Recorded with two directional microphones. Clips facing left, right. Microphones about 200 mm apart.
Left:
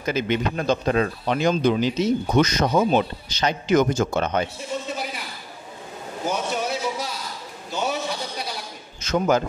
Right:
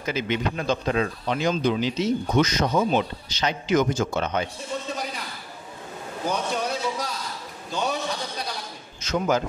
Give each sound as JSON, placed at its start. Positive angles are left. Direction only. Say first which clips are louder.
{"t": 0.0, "sound": "speech", "louder": "left 3 dB", "side_deg": 45}
{"t": 6.2, "sound": "a man's voice", "louder": "left 1 dB", "side_deg": 5}
{"t": 7.7, "sound": "a sound", "louder": "left 1 dB", "side_deg": 5}
{"t": 9.0, "sound": "speech", "louder": "left 3 dB", "side_deg": 50}